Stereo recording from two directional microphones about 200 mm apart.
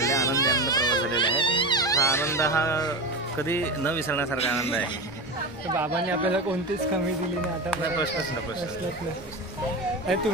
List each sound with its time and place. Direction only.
0.0 s music: 15° left (ahead or behind)
3.3 s speech: 10° left (ahead or behind)
6.0 s speech: 5° right (ahead or behind)